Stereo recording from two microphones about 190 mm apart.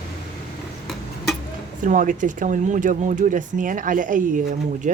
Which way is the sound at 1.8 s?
45° right (ahead or behind).